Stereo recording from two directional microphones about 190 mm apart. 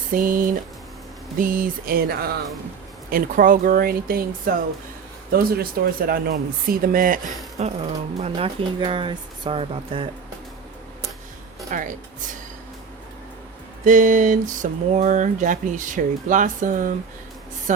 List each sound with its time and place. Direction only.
0.1 s speech: 45° right (ahead or behind)
7.6 s speech: 35° right (ahead or behind)
11.7 s speech: 45° right (ahead or behind)
13.8 s speech: 40° right (ahead or behind)